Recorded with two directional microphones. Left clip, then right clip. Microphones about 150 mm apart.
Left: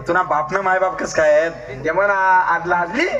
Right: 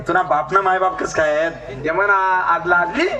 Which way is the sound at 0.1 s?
30° left (ahead or behind).